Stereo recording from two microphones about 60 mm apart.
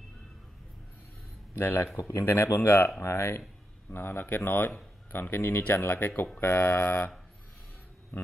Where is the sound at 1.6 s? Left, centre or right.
Left.